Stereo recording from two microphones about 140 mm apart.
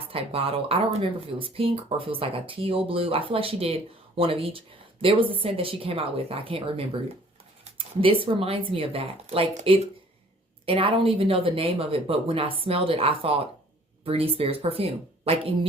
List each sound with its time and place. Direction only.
0.1 s speech: 45° right (ahead or behind)
10.7 s speech: 40° right (ahead or behind)